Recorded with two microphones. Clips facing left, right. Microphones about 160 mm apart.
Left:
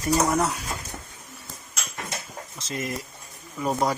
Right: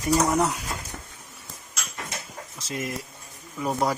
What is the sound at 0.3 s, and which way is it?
Speech, 15° right (ahead or behind).